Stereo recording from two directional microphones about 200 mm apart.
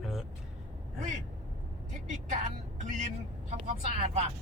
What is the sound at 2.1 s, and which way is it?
Speech, 40° right (ahead or behind).